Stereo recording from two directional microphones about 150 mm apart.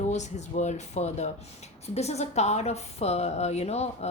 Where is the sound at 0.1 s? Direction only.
50° left (ahead or behind).